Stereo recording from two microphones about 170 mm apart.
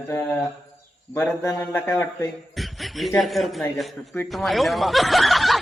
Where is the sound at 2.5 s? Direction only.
Centre (ahead or behind).